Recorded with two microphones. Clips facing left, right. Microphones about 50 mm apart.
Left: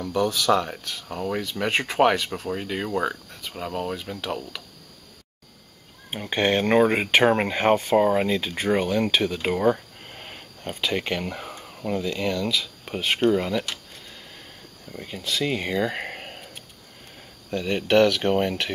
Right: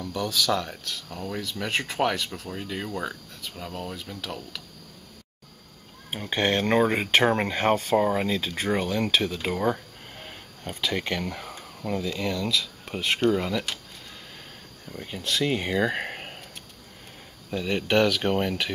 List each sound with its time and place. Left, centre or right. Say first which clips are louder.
0.0 s speech: left 4 dB; centre
6.3 s speech: left 3 dB; centre
9.3 s speech: left 4 dB; centre
10.0 s a sound: left 3 dB; left
12.2 s speech: left 2 dB; centre
13.3 s speech: left 2 dB; centre
14.9 s speech: even; centre
17.5 s speech: left 3 dB; centre